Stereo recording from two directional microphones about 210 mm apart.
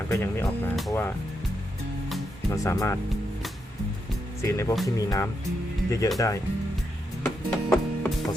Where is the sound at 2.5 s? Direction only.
15° left (ahead or behind).